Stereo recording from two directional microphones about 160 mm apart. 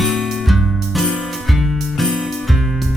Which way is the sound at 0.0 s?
Centre (ahead or behind).